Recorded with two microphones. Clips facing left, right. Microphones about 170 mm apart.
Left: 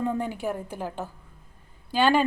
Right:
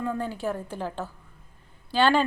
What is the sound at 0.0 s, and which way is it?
A woman's voice, 20° left (ahead or behind).